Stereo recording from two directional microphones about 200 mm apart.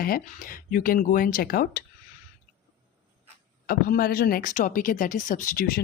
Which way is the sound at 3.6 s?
50° left (ahead or behind).